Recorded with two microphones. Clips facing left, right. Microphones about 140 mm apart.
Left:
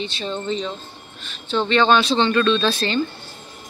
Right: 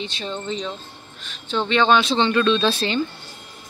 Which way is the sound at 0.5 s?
10° right (ahead or behind).